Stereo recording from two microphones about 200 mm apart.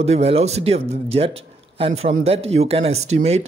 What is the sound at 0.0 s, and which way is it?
A man's voice, 30° right (ahead or behind).